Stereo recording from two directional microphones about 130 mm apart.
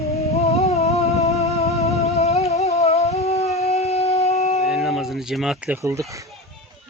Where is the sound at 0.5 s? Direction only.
55° left (ahead or behind).